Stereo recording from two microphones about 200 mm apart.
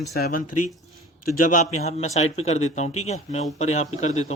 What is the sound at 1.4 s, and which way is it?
Speech, 40° left (ahead or behind).